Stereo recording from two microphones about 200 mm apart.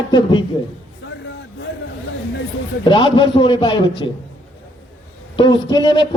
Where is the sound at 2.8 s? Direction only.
25° left (ahead or behind).